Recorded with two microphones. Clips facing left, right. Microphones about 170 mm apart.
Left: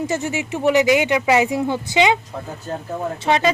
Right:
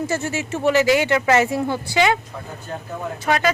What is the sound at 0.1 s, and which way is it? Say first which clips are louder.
Speech: left 1 dB; 15° left (ahead or behind).